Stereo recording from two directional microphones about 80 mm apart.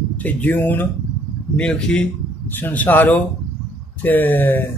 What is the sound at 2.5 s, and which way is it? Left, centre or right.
Speech, left.